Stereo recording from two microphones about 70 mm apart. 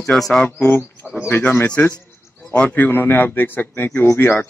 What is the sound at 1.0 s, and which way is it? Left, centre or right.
Bird, left.